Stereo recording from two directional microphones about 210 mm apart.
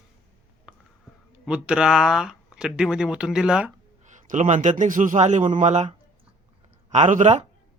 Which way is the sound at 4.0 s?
35° right (ahead or behind).